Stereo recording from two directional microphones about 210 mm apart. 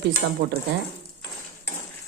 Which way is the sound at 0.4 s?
50° right (ahead or behind).